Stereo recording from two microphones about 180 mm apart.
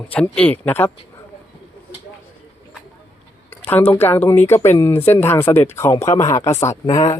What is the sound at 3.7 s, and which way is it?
Speech, 10° left (ahead or behind).